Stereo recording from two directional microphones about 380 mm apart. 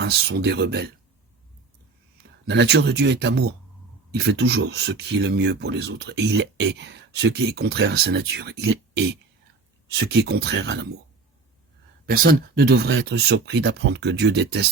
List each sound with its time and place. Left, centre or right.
0.0 s speech: right
2.5 s speech: right
12.0 s speech: right